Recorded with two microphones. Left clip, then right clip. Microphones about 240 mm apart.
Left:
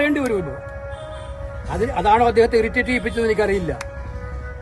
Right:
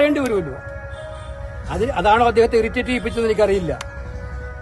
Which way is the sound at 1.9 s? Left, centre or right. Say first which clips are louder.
Right 1 dB; centre.